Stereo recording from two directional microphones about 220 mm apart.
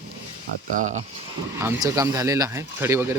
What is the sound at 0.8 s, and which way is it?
Speech, 35° right (ahead or behind).